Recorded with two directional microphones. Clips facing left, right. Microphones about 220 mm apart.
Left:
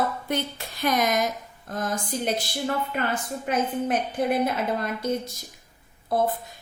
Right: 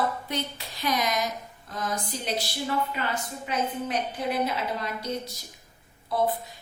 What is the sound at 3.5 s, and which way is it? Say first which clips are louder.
Speech: left 4 dB; 50° left (ahead or behind).